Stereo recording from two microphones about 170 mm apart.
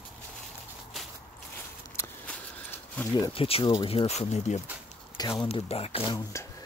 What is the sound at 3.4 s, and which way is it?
Speech, 35° left (ahead or behind).